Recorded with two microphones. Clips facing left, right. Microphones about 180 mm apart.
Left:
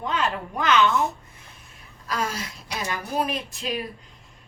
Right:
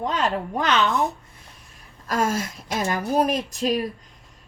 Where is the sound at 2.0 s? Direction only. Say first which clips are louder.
Right 5 dB; 50° right (ahead or behind).